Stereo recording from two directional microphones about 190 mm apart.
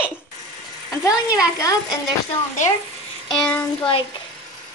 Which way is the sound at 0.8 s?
15° left (ahead or behind).